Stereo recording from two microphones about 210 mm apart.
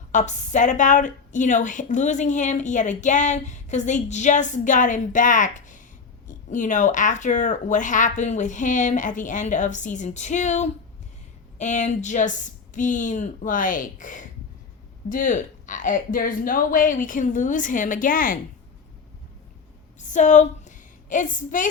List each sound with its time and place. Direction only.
0.1 s a woman's voice: 35° left (ahead or behind)
20.0 s a woman's voice: 35° left (ahead or behind)